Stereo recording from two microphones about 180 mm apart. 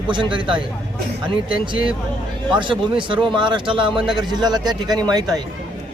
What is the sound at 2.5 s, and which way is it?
Speech, 25° right (ahead or behind).